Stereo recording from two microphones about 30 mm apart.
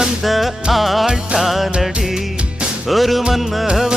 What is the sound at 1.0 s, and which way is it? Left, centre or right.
Music, right.